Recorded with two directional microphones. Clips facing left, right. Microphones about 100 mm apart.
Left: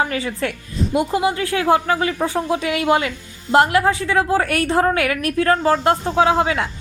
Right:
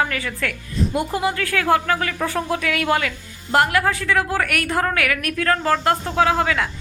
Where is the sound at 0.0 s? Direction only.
25° left (ahead or behind).